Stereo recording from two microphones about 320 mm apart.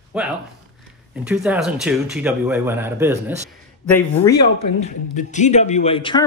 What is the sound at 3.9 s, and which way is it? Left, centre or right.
Speech, centre.